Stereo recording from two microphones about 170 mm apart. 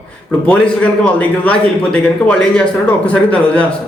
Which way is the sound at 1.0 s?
5° left (ahead or behind).